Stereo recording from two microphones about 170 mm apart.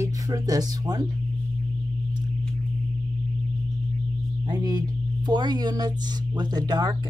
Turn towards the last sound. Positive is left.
turn(degrees=-25)  # may be behind; listen again after turning